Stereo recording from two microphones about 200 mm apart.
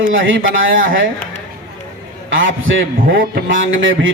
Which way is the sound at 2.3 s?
70° right (ahead or behind).